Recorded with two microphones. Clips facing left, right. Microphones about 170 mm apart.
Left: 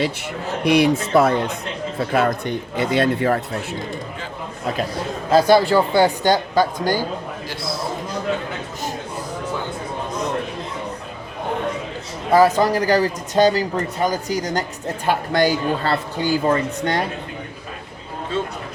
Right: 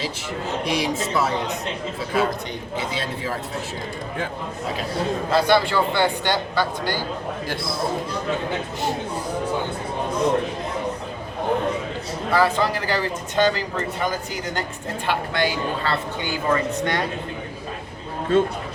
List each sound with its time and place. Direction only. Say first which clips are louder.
0.6 s speech: left 10 dB; 60° left (ahead or behind)
5.3 s speech: left 6 dB; 40° left (ahead or behind)
7.5 s speech: left 3 dB; 55° right (ahead or behind)
12.3 s speech: left 6 dB; 40° left (ahead or behind)
18.3 s speech: right 6 dB; 55° right (ahead or behind)